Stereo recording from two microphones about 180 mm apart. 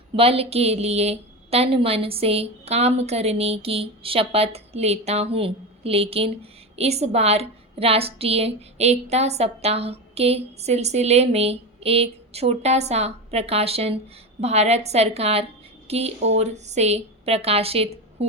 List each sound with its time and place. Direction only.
0.2 s a woman's voice: 30° right (ahead or behind)